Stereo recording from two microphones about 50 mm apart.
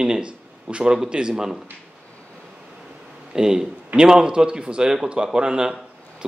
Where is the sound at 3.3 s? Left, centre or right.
Centre.